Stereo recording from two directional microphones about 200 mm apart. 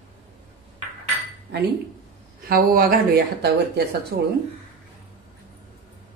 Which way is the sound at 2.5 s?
50° right (ahead or behind).